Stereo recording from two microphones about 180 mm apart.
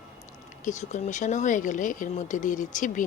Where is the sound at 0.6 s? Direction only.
40° left (ahead or behind).